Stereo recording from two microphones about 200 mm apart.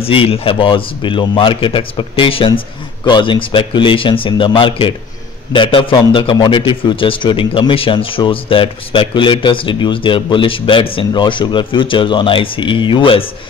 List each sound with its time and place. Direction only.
0.0 s a man's voice: 30° left (ahead or behind)